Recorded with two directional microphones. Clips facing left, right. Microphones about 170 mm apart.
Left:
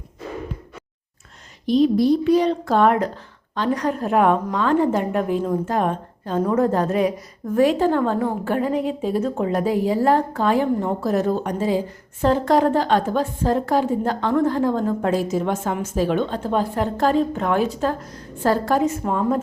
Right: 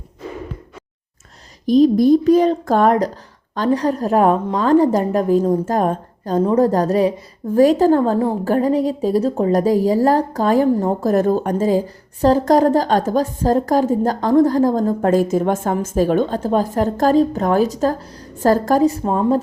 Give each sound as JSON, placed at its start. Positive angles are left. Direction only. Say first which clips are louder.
{"t": 1.6, "sound": "a woman's voice", "louder": "right 4 dB", "side_deg": -45}